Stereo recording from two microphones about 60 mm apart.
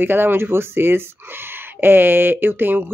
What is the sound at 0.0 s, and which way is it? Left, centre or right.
Speech, right.